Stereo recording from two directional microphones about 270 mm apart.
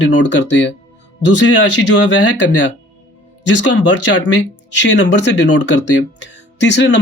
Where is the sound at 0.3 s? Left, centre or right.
Left.